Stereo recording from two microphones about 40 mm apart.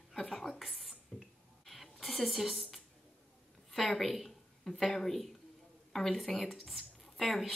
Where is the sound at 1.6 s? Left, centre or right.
Centre.